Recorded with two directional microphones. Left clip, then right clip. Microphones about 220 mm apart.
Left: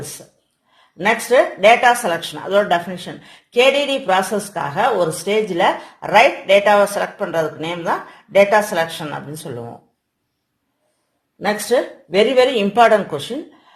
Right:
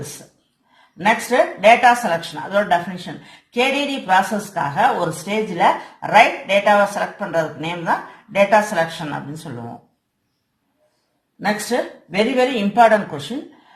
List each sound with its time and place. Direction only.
1.0 s speech: 40° left (ahead or behind)
11.7 s a man's voice: 40° left (ahead or behind)